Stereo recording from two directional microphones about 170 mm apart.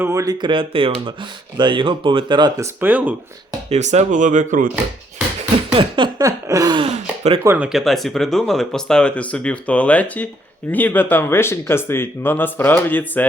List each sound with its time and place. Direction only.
0.0 s speech: 15° right (ahead or behind)
2.8 s speech: 10° right (ahead or behind)
3.7 s speech: 40° right (ahead or behind)
5.7 s speech: 25° right (ahead or behind)
7.4 s speech: 10° right (ahead or behind); by 13.2 s 10° left (ahead or behind)